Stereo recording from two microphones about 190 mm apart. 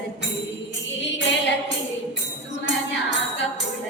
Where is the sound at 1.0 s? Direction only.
70° left (ahead or behind).